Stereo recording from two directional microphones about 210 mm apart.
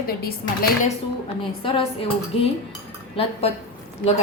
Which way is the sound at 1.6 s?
25° left (ahead or behind).